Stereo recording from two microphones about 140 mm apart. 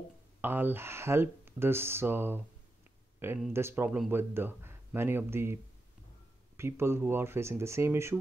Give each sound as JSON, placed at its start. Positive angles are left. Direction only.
{"t": 0.4, "sound": "speech", "side_deg": -15}